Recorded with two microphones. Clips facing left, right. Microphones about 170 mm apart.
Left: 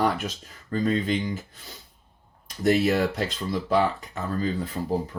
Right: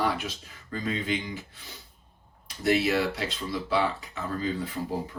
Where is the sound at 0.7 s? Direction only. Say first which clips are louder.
Left 6 dB; 40° left (ahead or behind).